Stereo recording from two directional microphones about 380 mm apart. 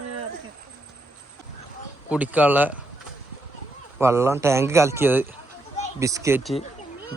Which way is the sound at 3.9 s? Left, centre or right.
Centre.